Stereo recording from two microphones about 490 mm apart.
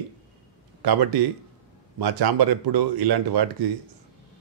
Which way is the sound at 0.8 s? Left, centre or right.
Right.